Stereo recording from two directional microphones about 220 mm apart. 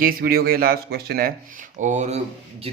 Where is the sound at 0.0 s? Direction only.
40° right (ahead or behind).